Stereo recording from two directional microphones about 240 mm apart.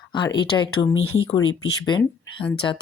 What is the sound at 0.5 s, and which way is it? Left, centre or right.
Speech, centre.